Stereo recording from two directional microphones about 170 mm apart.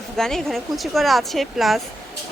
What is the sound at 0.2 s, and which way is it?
Speech, 5° left (ahead or behind).